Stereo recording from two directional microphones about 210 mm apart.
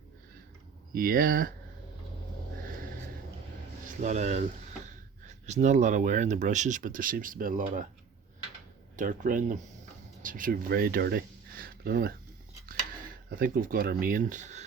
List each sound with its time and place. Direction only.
0.9 s speech: 45° right (ahead or behind)
4.0 s speech: 35° right (ahead or behind)
9.0 s speech: 40° right (ahead or behind)